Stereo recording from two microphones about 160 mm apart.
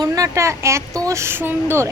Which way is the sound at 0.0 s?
20° right (ahead or behind).